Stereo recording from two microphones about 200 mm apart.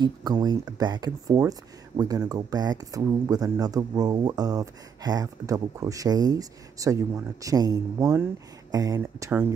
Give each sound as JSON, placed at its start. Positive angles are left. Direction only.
{"t": 0.0, "sound": "speech", "side_deg": -20}